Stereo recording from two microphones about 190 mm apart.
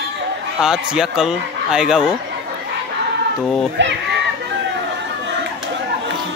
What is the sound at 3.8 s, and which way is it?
Speech, 70° right (ahead or behind).